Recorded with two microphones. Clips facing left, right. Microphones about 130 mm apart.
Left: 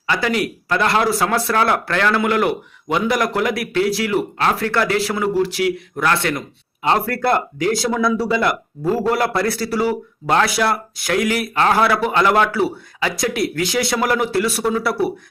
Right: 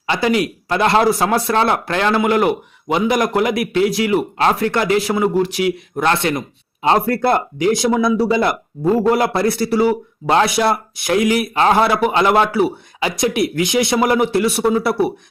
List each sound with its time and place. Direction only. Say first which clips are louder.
0.1 s speech: right 3 dB; 25° right (ahead or behind)